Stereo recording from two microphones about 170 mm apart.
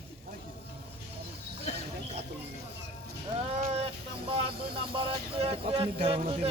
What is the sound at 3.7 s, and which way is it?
Speech, 35° right (ahead or behind).